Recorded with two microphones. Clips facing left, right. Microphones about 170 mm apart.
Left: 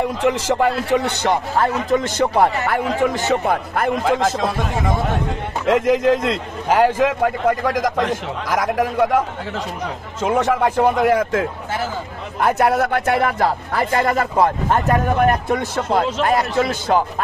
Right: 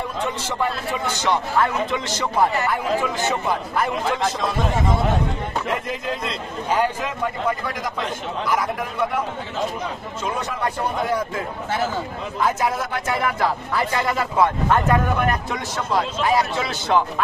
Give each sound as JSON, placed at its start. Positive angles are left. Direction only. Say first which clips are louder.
{"t": 0.2, "sound": "speech", "louder": "left 7 dB", "side_deg": 85}
{"t": 1.6, "sound": "speech", "louder": "left 4 dB", "side_deg": 45}
{"t": 5.7, "sound": "a man's voice", "louder": "left 16 dB", "side_deg": 90}
{"t": 10.2, "sound": "a man's voice", "louder": "left 9 dB", "side_deg": 90}
{"t": 12.4, "sound": "a man's voice", "louder": "left 6 dB", "side_deg": 65}
{"t": 13.2, "sound": "speech", "louder": "left 3 dB", "side_deg": 50}
{"t": 14.4, "sound": "speech", "louder": "even", "side_deg": 35}
{"t": 15.4, "sound": "speech", "louder": "left 6 dB", "side_deg": 55}